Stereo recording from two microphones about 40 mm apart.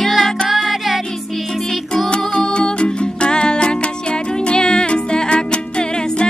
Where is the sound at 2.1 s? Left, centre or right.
Left.